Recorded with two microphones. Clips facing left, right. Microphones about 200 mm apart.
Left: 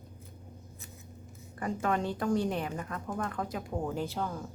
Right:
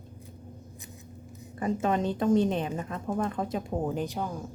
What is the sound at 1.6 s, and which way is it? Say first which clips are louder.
A woman's voice: right 4 dB; 20° right (ahead or behind).